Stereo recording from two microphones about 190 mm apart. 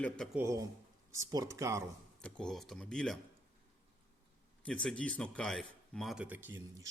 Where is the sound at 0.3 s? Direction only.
15° right (ahead or behind).